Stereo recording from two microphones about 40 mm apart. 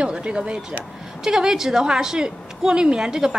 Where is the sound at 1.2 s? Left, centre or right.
Centre.